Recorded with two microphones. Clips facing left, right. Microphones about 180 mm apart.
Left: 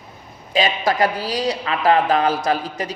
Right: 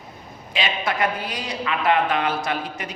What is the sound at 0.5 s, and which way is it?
Speech, 40° left (ahead or behind).